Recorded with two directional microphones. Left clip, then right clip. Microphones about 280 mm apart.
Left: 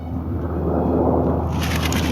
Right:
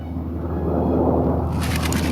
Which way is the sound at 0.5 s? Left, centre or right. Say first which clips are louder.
Left 1 dB; left.